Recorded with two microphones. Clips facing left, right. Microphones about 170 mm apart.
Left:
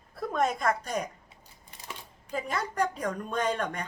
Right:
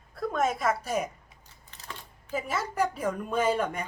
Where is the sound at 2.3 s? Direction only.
5° right (ahead or behind).